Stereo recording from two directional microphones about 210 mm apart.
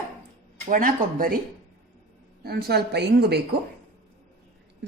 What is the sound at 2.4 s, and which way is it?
Speech, 50° right (ahead or behind).